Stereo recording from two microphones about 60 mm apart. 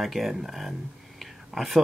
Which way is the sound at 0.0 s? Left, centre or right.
Centre.